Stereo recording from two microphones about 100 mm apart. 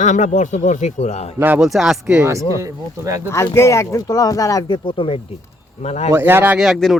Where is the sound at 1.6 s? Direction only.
5° right (ahead or behind).